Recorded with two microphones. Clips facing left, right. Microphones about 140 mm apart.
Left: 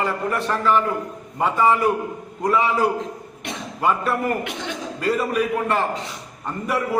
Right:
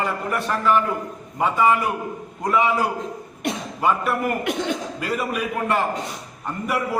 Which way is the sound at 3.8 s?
5° right (ahead or behind).